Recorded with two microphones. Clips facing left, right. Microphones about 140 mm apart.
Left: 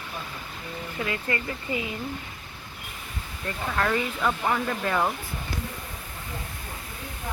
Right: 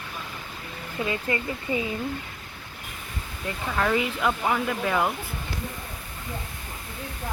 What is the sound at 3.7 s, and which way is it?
Speech, 5° right (ahead or behind).